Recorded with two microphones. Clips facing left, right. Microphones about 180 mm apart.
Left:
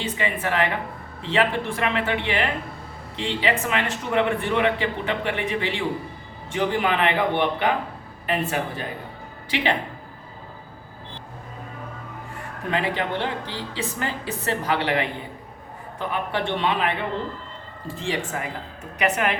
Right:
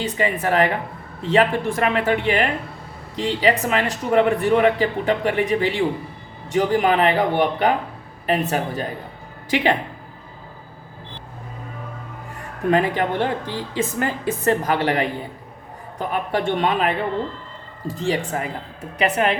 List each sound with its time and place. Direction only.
0.0 s a woman's voice: 40° right (ahead or behind)
12.7 s a woman's voice: 45° right (ahead or behind)